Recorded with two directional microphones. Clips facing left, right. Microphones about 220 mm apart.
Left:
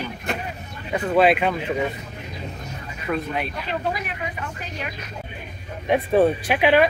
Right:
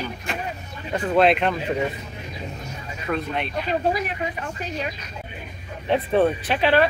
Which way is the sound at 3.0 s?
5° left (ahead or behind).